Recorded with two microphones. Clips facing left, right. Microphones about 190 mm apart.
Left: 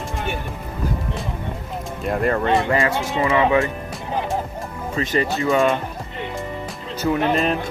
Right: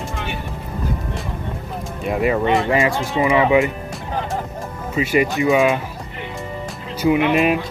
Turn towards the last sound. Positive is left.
turn(degrees=-15)  # may be behind; listen again after turning